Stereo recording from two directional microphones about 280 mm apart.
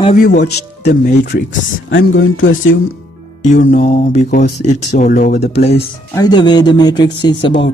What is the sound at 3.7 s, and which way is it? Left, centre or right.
Speech, left.